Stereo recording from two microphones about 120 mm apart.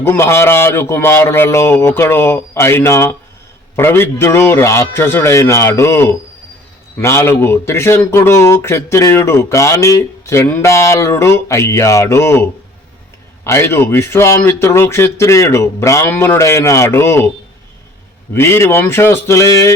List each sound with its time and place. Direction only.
0.0 s speech: 20° left (ahead or behind)
18.3 s speech: 20° left (ahead or behind)